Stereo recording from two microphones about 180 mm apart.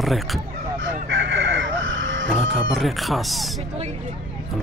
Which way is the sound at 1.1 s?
75° right (ahead or behind).